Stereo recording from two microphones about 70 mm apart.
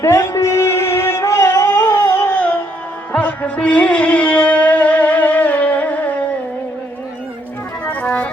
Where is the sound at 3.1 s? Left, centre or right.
Centre.